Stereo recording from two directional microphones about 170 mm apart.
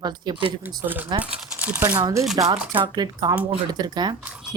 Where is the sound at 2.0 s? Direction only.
25° right (ahead or behind).